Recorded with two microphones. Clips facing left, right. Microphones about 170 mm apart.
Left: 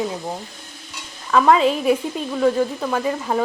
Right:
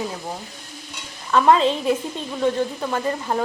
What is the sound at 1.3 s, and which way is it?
Speech, 5° left (ahead or behind).